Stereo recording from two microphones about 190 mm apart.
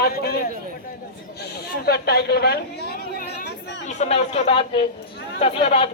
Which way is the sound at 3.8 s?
35° left (ahead or behind).